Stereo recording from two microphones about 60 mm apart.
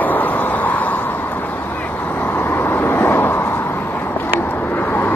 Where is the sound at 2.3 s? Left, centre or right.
Left.